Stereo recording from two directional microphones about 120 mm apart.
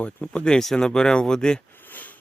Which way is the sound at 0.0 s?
10° left (ahead or behind).